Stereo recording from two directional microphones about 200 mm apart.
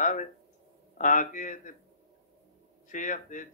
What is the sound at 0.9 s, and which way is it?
Speech, 40° left (ahead or behind).